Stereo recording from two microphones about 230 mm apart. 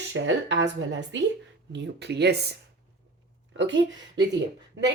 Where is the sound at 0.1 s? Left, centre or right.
Right.